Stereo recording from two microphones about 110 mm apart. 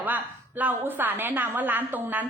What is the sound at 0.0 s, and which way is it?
A woman's voice, 15° right (ahead or behind).